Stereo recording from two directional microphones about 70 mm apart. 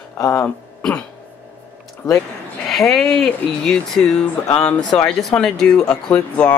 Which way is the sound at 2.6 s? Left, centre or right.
Centre.